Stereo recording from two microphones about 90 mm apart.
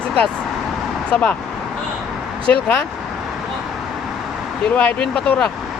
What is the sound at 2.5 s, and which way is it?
Speech, 15° left (ahead or behind).